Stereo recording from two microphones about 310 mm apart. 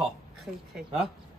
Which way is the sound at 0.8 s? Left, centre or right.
Centre.